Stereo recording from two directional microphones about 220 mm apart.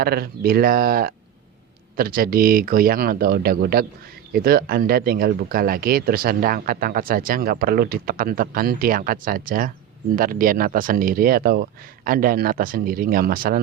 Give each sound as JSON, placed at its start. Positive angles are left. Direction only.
{"t": 0.0, "sound": "speech", "side_deg": -45}